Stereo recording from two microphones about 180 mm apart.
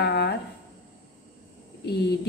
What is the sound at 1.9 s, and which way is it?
Speech, 65° left (ahead or behind).